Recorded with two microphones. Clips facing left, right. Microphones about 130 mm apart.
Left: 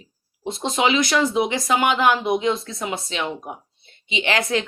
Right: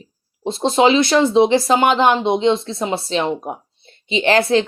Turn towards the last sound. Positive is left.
turn(degrees=-30)  # may be behind; listen again after turning